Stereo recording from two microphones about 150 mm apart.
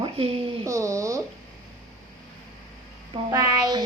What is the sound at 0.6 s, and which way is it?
Speech, 20° right (ahead or behind).